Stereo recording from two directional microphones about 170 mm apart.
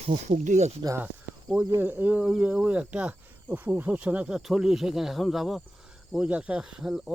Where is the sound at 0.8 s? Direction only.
20° right (ahead or behind).